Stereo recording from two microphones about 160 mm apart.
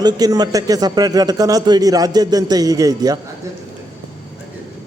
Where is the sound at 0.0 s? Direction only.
25° right (ahead or behind).